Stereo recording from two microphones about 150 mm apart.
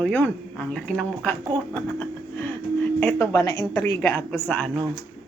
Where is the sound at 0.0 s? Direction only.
10° left (ahead or behind).